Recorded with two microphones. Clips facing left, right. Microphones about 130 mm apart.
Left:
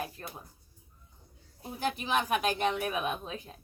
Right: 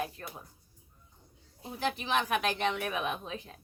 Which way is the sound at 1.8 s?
10° left (ahead or behind).